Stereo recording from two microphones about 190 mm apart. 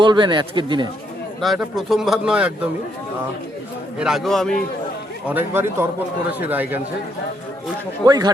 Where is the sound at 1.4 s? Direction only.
Centre (ahead or behind).